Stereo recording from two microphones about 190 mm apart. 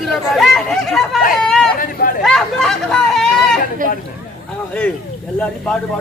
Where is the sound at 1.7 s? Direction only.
50° left (ahead or behind).